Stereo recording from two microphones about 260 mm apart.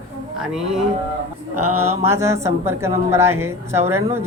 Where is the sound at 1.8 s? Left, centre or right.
Centre.